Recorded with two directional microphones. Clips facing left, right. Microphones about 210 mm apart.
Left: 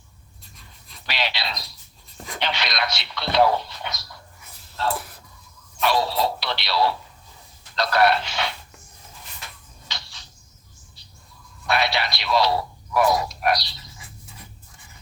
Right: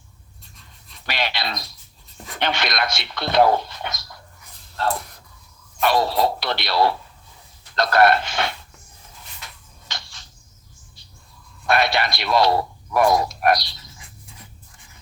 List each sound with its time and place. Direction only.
1.0 s speech: 50° right (ahead or behind)
5.8 s speech: 50° right (ahead or behind)
9.9 s a sound: 50° right (ahead or behind)
11.6 s speech: 50° right (ahead or behind)